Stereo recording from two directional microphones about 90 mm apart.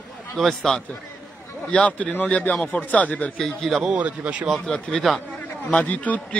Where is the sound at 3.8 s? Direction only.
15° right (ahead or behind).